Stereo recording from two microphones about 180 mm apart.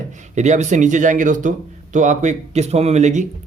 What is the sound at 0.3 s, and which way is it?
Speech, 40° right (ahead or behind).